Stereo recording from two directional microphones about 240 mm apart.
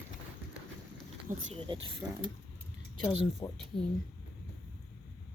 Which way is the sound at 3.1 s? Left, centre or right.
Left.